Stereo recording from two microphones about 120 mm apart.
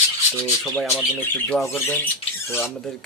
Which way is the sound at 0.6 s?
Centre (ahead or behind).